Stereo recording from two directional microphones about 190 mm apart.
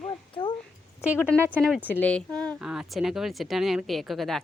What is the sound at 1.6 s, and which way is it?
A child's voice, 5° left (ahead or behind).